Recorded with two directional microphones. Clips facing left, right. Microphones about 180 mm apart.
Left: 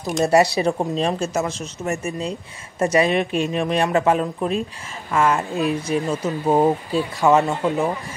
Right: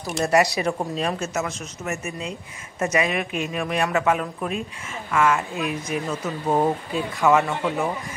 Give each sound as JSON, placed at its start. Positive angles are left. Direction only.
{"t": 0.2, "sound": "speech", "side_deg": 30}
{"t": 6.2, "sound": "speech", "side_deg": 20}
{"t": 6.9, "sound": "speech", "side_deg": 30}